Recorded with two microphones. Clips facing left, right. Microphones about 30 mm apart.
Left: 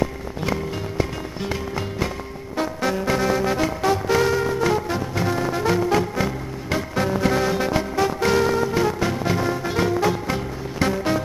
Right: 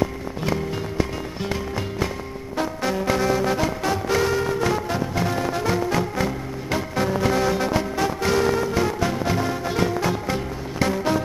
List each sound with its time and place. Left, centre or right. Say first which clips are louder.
2.5 s music: left 1 dB; centre